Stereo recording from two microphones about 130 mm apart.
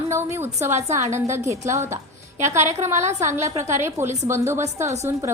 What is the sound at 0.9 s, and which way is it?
A woman's voice, 20° right (ahead or behind).